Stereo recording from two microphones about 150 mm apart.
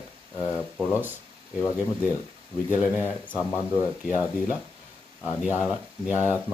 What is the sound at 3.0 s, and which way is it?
Speech, 10° left (ahead or behind).